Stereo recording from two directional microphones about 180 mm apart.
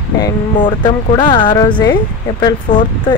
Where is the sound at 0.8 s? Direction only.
25° left (ahead or behind).